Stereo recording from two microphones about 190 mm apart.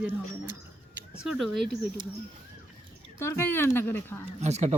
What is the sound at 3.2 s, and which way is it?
Speech, 10° left (ahead or behind).